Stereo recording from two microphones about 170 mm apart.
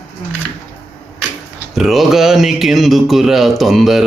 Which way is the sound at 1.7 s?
Centre (ahead or behind).